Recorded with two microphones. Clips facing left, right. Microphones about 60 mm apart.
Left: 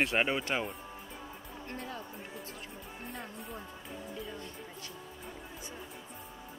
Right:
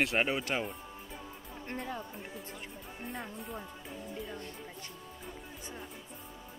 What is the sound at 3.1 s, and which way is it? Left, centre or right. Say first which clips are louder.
Speech: right 3 dB; centre.